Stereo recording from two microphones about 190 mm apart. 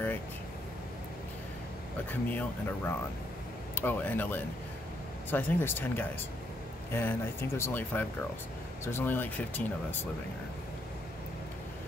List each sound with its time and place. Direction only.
2.0 s speech: 10° left (ahead or behind)
3.7 s speech: 10° left (ahead or behind)